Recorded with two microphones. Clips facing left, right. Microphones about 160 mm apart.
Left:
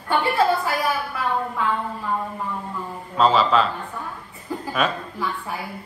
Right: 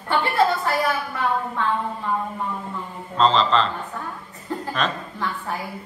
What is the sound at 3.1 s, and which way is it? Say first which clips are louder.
Speech: left 1 dB; 10° left (ahead or behind).